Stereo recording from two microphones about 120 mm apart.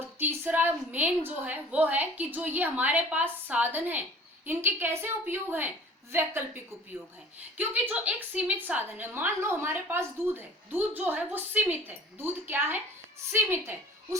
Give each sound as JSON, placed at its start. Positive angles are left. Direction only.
{"t": 0.0, "sound": "a woman's voice", "side_deg": -15}